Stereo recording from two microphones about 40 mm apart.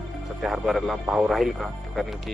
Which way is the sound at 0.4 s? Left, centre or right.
Centre.